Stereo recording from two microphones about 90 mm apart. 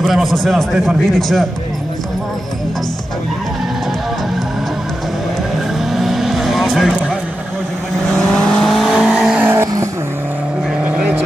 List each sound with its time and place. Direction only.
0.0 s a man's voice: centre (ahead or behind)
5.9 s vehicle: 5° right (ahead or behind)
8.1 s vehicle: 10° left (ahead or behind)
9.4 s vehicle: 25° right (ahead or behind)
10.8 s vehicle: 15° right (ahead or behind)